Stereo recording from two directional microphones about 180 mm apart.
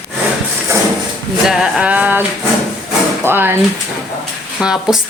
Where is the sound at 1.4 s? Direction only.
5° right (ahead or behind).